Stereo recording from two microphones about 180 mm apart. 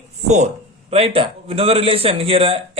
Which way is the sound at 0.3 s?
40° right (ahead or behind).